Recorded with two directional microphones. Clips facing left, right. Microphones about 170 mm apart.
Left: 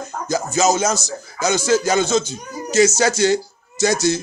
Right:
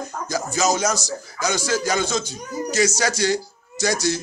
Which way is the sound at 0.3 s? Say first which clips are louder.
Left 4 dB; 25° left (ahead or behind).